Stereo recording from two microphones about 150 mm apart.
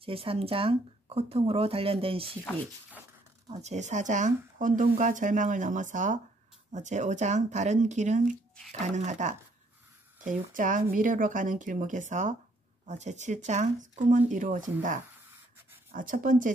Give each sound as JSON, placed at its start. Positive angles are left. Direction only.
{"t": 0.0, "sound": "speech", "side_deg": -40}
{"t": 3.4, "sound": "speech", "side_deg": -45}